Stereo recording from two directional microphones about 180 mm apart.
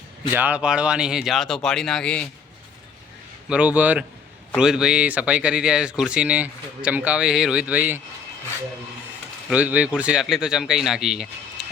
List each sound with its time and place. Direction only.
0.3 s speech: 10° right (ahead or behind)
3.5 s speech: 10° right (ahead or behind)
9.5 s speech: 10° right (ahead or behind)